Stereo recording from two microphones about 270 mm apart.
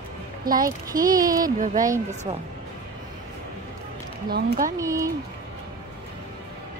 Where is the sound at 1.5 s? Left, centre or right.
Right.